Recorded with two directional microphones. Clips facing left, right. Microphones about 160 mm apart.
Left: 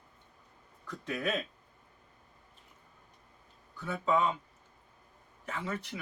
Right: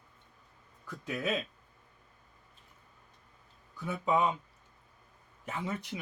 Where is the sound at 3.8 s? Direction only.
15° right (ahead or behind).